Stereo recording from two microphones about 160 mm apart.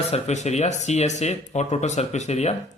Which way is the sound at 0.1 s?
45° left (ahead or behind).